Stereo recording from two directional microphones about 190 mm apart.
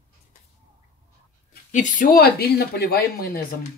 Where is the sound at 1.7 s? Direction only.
40° left (ahead or behind).